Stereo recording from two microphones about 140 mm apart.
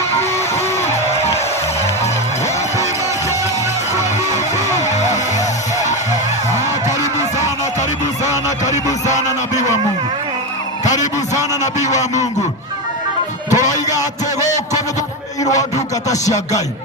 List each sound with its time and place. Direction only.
4.8 s music: 55° left (ahead or behind)
7.2 s music: 55° left (ahead or behind)
11.0 s a sound: 55° left (ahead or behind)
11.9 s a man's voice: 55° left (ahead or behind)
13.5 s music: 60° left (ahead or behind)
16.0 s music: 25° left (ahead or behind)